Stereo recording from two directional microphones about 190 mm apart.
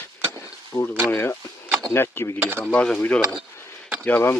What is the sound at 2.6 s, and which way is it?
Speech, 5° left (ahead or behind).